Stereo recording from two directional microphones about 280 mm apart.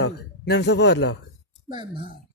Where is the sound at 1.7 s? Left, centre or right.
Centre.